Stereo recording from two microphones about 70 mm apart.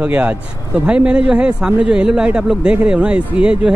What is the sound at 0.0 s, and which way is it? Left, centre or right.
Speech, centre.